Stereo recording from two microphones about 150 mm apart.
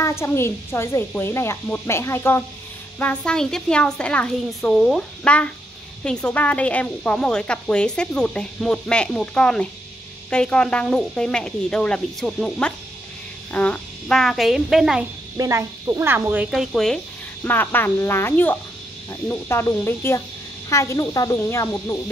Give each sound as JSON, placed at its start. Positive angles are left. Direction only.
{"t": 0.0, "sound": "a woman's voice", "side_deg": 20}
{"t": 15.3, "sound": "speech", "side_deg": -20}
{"t": 16.4, "sound": "speech", "side_deg": 0}
{"t": 17.4, "sound": "a woman's voice", "side_deg": 15}